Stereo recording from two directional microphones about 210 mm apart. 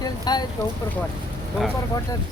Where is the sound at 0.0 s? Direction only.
20° left (ahead or behind).